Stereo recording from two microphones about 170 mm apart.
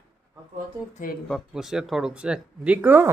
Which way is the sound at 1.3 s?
Centre (ahead or behind).